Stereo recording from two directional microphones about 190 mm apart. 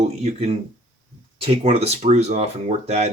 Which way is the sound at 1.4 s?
30° right (ahead or behind).